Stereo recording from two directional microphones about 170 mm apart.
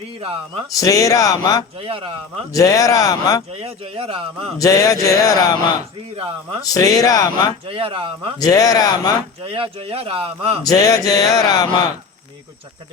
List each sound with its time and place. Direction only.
0.8 s speech: 20° left (ahead or behind)
1.8 s speech: 30° right (ahead or behind)
2.5 s speech: 20° left (ahead or behind)
3.6 s speech: 35° right (ahead or behind)
4.5 s speech: 20° left (ahead or behind)
6.7 s speech: 20° left (ahead or behind)
7.7 s speech: 30° right (ahead or behind)
8.4 s speech: 20° left (ahead or behind)
9.4 s speech: 30° right (ahead or behind)
10.6 s speech: 20° left (ahead or behind)